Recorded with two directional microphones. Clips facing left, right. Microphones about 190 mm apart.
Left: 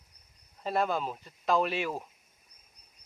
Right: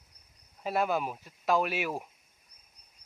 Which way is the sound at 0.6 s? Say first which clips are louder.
Even; 5° right (ahead or behind).